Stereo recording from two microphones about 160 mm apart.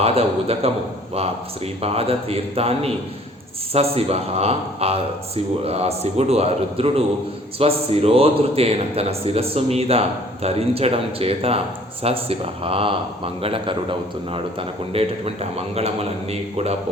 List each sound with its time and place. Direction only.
0.0 s a man's voice: 40° right (ahead or behind)